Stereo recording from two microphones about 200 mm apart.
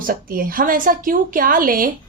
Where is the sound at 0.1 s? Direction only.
45° right (ahead or behind).